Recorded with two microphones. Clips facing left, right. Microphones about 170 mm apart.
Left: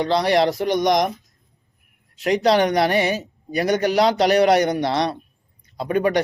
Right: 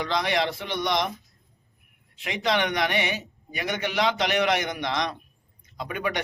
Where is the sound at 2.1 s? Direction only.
40° left (ahead or behind).